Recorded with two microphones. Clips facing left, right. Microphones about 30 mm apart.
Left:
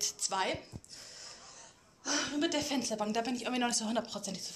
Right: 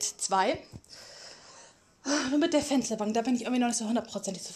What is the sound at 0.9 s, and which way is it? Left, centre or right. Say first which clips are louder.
Gasp: right 2 dB; centre.